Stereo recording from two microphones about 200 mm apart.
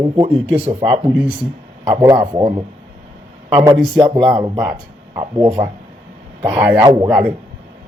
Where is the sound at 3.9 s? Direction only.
25° right (ahead or behind).